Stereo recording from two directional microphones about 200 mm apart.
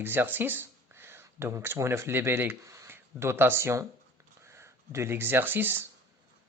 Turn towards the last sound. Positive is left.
turn(degrees=-10)  # may be behind; listen again after turning